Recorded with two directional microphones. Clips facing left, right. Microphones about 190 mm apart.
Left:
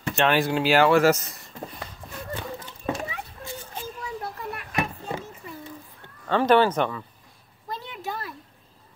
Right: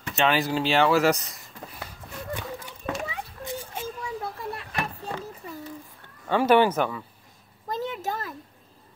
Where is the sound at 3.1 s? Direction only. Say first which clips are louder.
Right 2 dB; 25° right (ahead or behind).